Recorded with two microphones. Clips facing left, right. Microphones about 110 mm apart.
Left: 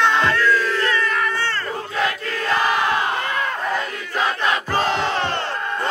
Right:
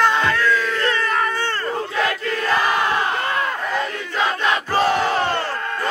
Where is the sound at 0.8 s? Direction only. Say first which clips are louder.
Right 1 dB; 35° right (ahead or behind).